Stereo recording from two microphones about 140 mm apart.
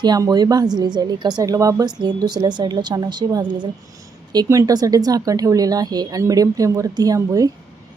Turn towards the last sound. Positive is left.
turn(degrees=-25)  # may be behind; listen again after turning